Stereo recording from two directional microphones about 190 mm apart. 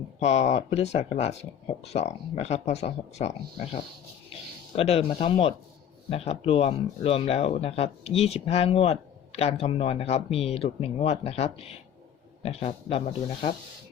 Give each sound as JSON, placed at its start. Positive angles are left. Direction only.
{"t": 0.2, "sound": "speech", "side_deg": 35}